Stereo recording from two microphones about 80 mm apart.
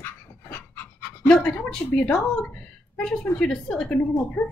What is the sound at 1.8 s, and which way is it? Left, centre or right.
Speech, left.